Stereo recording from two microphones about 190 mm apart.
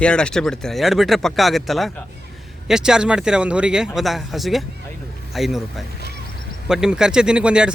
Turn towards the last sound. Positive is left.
turn(degrees=-5)  # may be behind; listen again after turning